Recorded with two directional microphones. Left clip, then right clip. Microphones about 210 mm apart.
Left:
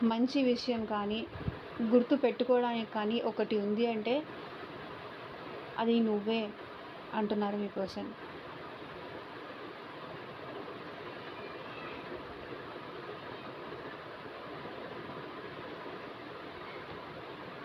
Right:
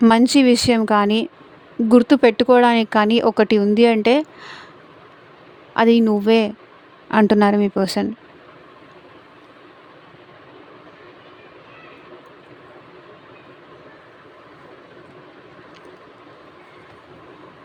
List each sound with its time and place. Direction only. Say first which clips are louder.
0.0 s a woman's voice: right 17 dB; 70° right (ahead or behind)
5.7 s speech: right 16 dB; 70° right (ahead or behind)